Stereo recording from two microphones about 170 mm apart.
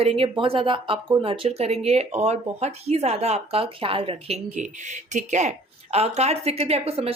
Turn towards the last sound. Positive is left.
turn(degrees=-35)  # may be behind; listen again after turning